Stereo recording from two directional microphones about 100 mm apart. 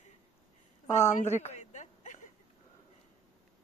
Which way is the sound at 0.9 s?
30° left (ahead or behind).